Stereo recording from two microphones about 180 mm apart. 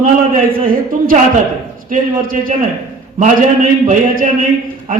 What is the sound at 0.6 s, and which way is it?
A man's voice, 50° right (ahead or behind).